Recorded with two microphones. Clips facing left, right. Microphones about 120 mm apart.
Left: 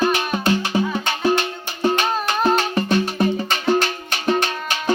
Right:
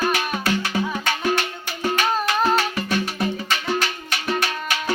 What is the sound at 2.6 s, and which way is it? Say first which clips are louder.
Music: left 4 dB; 30° left (ahead or behind).